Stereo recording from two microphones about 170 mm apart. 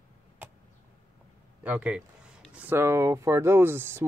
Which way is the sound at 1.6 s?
10° right (ahead or behind).